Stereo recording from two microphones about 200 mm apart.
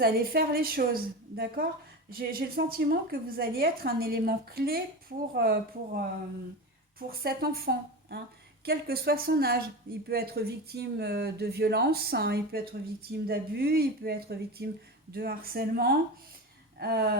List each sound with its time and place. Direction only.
0.0 s speech: 50° right (ahead or behind)
7.1 s speech: 50° right (ahead or behind)